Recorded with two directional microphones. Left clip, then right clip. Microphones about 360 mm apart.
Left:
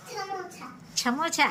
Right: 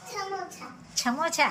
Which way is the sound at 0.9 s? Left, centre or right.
Centre.